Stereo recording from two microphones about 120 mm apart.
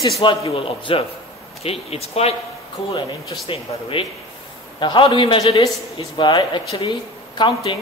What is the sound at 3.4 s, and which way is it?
Speech, 50° left (ahead or behind).